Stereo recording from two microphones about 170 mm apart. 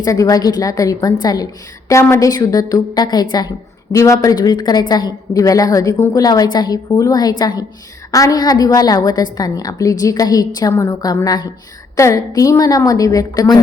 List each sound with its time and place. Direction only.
0.0 s a woman's voice: 20° left (ahead or behind)